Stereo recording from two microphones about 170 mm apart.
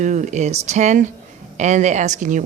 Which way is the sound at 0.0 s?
45° right (ahead or behind).